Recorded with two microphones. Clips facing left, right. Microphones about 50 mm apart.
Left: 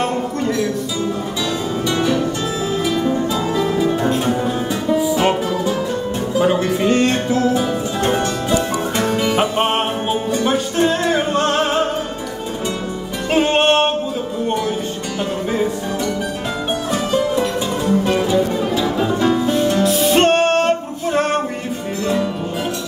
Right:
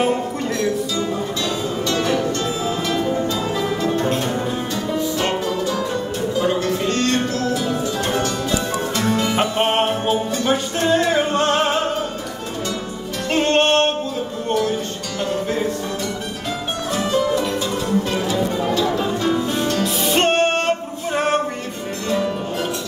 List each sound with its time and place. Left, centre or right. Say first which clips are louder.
0.0 s music: even; centre
3.5 s music: left 5 dB; centre; by 8.5 s left
9.0 s music: left 2 dB; centre
13.3 s music: left 2 dB; centre
16.9 s music: even; centre
19.8 s music: left 4 dB; centre